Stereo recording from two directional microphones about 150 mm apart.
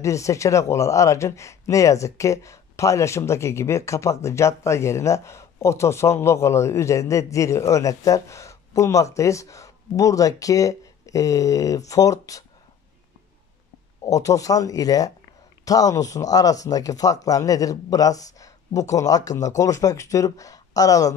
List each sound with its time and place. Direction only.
0.0 s speech: 20° left (ahead or behind)
14.0 s speech: 20° left (ahead or behind)